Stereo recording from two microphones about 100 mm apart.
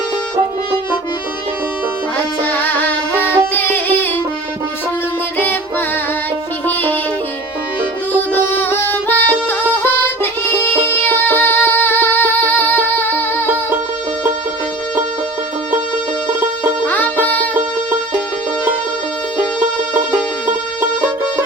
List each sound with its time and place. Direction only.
2.1 s music: 20° left (ahead or behind)
8.1 s music: 20° left (ahead or behind)
16.8 s music: 20° left (ahead or behind)